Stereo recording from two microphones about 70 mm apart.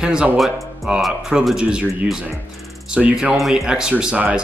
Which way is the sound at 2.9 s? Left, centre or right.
Centre.